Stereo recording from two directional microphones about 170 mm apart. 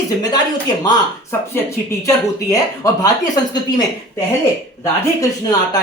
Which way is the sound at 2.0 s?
20° left (ahead or behind).